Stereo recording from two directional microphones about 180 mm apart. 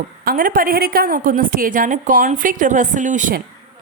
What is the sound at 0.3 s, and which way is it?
A woman's voice, 50° right (ahead or behind).